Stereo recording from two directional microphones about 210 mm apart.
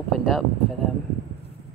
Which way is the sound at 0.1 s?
Centre (ahead or behind).